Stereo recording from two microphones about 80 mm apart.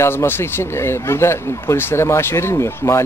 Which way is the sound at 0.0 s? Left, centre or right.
Left.